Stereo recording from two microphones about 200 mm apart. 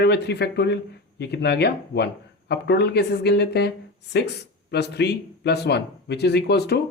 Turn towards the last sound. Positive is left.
turn(degrees=55)  # may be behind; listen again after turning